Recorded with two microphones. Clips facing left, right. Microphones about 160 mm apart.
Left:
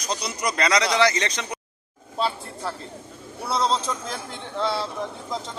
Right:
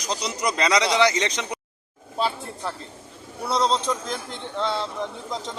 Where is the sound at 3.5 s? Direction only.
5° left (ahead or behind).